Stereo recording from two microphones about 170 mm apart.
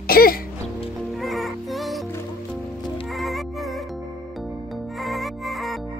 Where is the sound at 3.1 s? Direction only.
Centre (ahead or behind).